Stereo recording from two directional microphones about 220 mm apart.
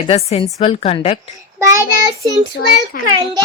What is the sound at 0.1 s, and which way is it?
Speech, 30° left (ahead or behind).